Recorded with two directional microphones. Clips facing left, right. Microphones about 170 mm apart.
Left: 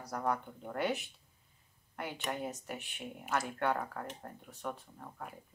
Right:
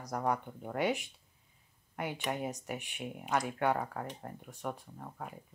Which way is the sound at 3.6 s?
10° right (ahead or behind).